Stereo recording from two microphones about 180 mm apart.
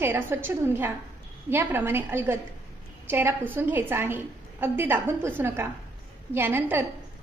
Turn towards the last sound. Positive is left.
turn(degrees=-10)  # may be behind; listen again after turning